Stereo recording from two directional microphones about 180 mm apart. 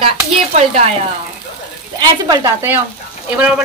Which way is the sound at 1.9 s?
20° right (ahead or behind).